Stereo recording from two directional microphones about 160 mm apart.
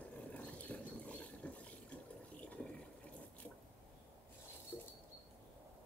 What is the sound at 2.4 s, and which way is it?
Water, 10° left (ahead or behind).